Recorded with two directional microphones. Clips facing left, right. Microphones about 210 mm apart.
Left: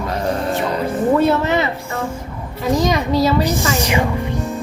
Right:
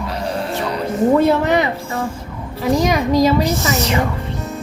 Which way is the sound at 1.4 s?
15° right (ahead or behind).